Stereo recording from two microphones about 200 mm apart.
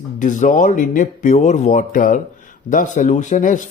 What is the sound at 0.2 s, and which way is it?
Speech, 40° left (ahead or behind).